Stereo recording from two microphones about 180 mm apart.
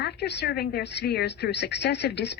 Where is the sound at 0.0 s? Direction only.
65° left (ahead or behind).